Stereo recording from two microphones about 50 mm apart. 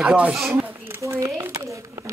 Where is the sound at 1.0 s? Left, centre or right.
Right.